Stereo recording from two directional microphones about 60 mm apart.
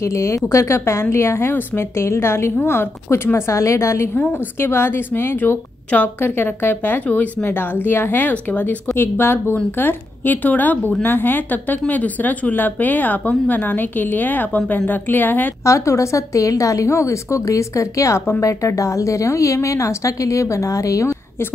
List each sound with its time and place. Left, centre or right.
0.0 s a woman's voice: left
8.9 s a woman's voice: left
15.6 s a woman's voice: left